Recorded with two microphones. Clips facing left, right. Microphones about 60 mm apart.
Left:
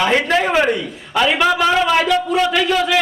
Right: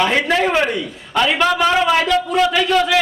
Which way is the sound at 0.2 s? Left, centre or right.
Centre.